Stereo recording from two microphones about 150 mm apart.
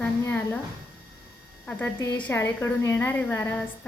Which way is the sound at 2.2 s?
15° left (ahead or behind).